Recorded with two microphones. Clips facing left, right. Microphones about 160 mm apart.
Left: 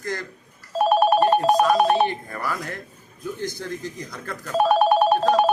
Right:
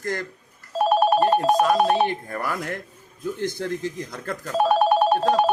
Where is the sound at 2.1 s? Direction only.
55° right (ahead or behind).